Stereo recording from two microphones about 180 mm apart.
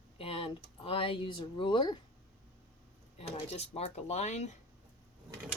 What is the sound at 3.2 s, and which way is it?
Speech, 35° left (ahead or behind).